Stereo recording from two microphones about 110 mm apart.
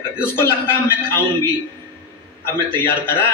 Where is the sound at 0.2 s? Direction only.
20° left (ahead or behind).